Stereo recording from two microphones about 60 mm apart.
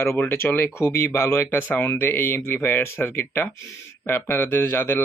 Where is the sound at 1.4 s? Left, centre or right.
Left.